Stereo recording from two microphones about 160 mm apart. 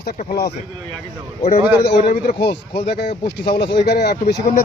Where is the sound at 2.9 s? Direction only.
90° left.